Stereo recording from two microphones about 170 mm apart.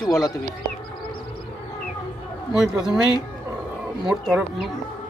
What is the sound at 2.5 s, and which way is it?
Speech, 5° right (ahead or behind).